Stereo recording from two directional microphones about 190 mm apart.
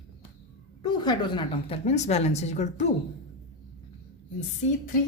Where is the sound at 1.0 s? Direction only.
25° left (ahead or behind).